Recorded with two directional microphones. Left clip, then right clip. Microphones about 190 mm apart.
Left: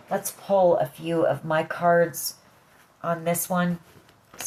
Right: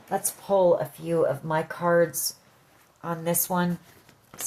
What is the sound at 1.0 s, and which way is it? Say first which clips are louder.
Speech: left 1 dB; 45° right (ahead or behind).